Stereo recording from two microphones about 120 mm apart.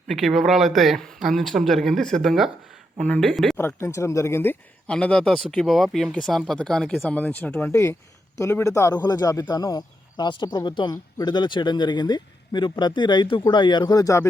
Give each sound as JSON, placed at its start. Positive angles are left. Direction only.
{"t": 0.1, "sound": "speech", "side_deg": 0}
{"t": 3.8, "sound": "speech", "side_deg": 25}
{"t": 4.9, "sound": "speech", "side_deg": 10}
{"t": 7.7, "sound": "speech", "side_deg": 25}